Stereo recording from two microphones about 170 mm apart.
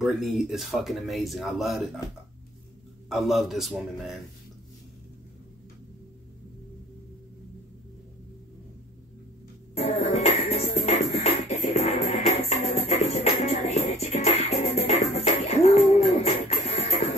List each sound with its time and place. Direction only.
0.0 s speech: centre (ahead or behind)
3.1 s speech: centre (ahead or behind)
9.8 s music: 40° left (ahead or behind)